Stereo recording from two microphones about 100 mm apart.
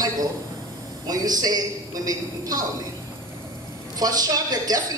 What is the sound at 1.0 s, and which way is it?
A woman's voice, 40° right (ahead or behind).